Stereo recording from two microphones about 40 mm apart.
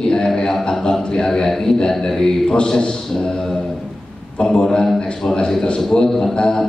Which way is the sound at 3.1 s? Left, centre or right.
Centre.